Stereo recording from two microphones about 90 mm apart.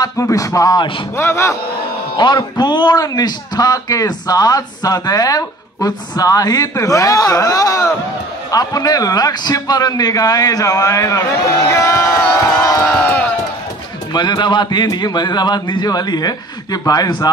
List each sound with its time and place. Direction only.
0.0 s speech: 40° left (ahead or behind)
1.1 s speech: 30° left (ahead or behind)
2.1 s a man's voice: 50° left (ahead or behind); by 12.2 s 35° left (ahead or behind)
12.8 s speech: 20° left (ahead or behind)
14.1 s a man's voice: 55° left (ahead or behind)